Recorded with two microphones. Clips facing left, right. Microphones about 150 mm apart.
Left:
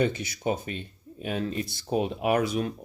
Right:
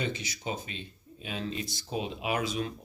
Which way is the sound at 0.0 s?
55° left (ahead or behind).